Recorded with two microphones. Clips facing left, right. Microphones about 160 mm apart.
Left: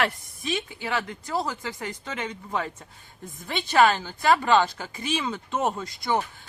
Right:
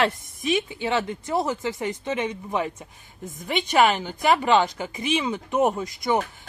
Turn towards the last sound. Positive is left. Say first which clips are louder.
# right 3 dB
turn(degrees=-20)  # may be behind; listen again after turning